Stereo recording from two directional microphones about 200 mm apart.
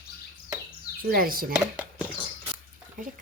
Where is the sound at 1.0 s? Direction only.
45° right (ahead or behind).